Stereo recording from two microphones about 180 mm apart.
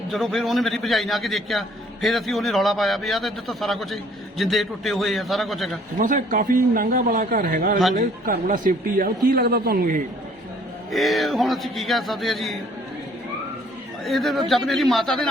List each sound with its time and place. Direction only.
0.1 s a man's voice: centre (ahead or behind)
6.0 s a man's voice: 45° right (ahead or behind)
10.9 s a man's voice: centre (ahead or behind)
14.0 s a man's voice: centre (ahead or behind)